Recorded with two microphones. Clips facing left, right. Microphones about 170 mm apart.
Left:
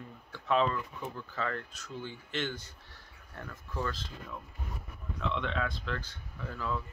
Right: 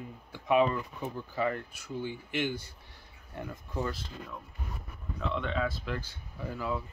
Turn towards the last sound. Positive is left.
turn(degrees=-15)  # may be behind; listen again after turning